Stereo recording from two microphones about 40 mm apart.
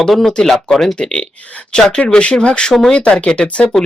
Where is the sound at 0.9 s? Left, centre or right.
Left.